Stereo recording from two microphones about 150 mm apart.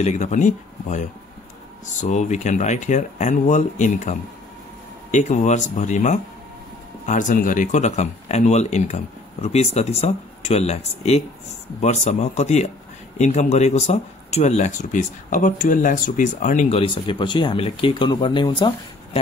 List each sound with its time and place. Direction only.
0.0 s speech: 50° left (ahead or behind); by 18.7 s 30° left (ahead or behind)